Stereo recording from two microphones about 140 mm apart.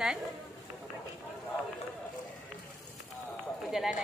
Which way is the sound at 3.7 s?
Centre (ahead or behind).